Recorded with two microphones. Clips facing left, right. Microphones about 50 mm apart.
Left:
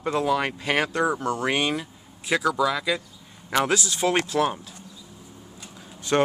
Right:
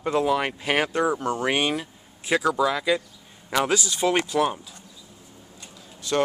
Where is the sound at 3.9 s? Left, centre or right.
Left.